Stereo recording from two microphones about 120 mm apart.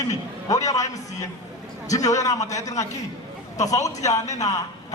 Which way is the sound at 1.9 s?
30° left (ahead or behind).